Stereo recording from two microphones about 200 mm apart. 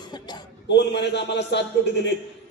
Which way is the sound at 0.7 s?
60° left (ahead or behind).